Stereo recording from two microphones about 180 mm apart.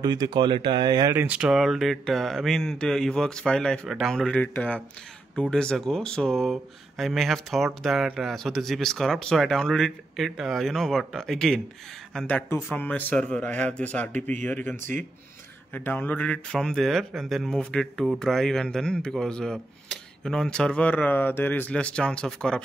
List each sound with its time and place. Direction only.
0.0 s speech: 25° right (ahead or behind)
1.1 s speech: 5° right (ahead or behind)